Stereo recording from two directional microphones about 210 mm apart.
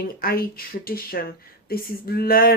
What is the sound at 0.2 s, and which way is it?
Speech, 45° left (ahead or behind).